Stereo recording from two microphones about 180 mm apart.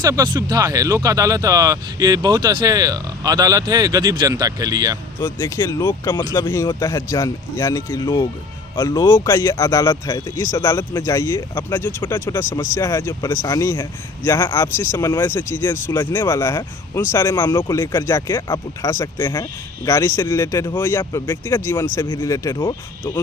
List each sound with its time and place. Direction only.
0.0 s speech: 20° right (ahead or behind)
5.2 s speech: 15° left (ahead or behind)
22.5 s speech: 25° left (ahead or behind)